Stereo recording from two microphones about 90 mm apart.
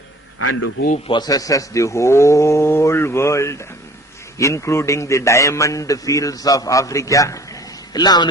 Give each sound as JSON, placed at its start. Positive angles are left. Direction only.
{"t": 1.2, "sound": "a man's voice", "side_deg": 45}